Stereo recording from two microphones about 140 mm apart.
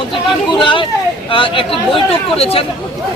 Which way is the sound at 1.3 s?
40° left (ahead or behind).